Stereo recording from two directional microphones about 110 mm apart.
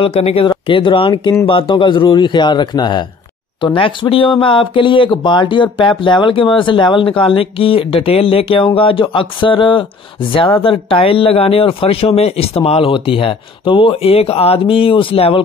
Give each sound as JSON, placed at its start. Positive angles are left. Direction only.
{"t": 0.0, "sound": "speech", "side_deg": 65}
{"t": 0.5, "sound": "speech", "side_deg": 50}